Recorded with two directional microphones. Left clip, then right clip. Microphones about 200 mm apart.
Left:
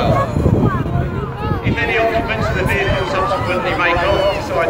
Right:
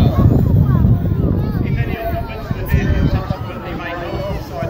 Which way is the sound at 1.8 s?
50° left (ahead or behind).